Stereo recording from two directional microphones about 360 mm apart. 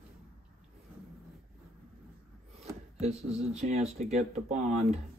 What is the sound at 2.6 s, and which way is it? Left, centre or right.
Speech, centre.